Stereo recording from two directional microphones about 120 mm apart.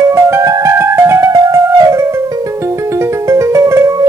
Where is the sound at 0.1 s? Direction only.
25° right (ahead or behind).